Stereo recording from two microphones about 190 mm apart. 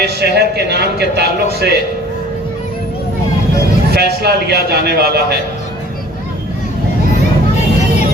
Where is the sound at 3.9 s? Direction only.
55° right (ahead or behind).